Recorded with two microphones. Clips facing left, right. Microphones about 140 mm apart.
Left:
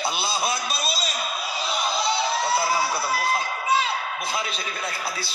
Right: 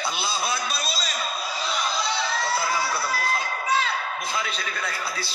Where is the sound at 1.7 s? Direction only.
30° left (ahead or behind).